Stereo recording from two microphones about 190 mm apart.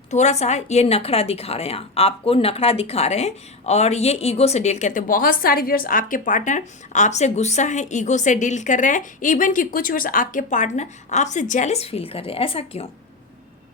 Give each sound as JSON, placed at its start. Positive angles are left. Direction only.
{"t": 0.1, "sound": "a woman's voice", "side_deg": 35}